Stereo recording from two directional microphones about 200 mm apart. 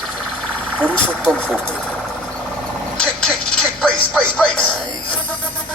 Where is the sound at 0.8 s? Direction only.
5° left (ahead or behind).